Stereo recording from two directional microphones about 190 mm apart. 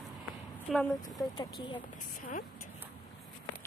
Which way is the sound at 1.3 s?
25° left (ahead or behind).